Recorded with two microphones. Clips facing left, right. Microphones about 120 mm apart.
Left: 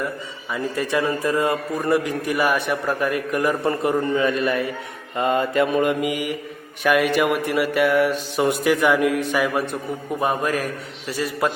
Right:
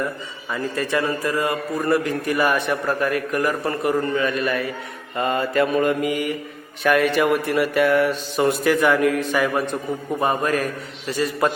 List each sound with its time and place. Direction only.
0.5 s a man's voice: 15° left (ahead or behind)